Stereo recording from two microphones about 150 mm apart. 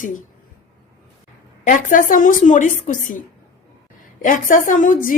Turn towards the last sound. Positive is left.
turn(degrees=60)  # may be behind; listen again after turning